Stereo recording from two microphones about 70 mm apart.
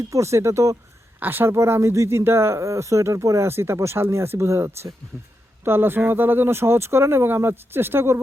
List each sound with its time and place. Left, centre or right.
0.1 s speech: right
1.2 s speech: right
1.5 s speech: right